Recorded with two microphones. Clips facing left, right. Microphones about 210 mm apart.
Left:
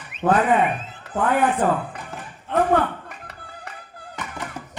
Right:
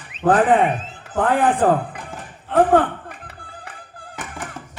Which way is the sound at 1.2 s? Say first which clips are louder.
Right 3 dB; 50° right (ahead or behind).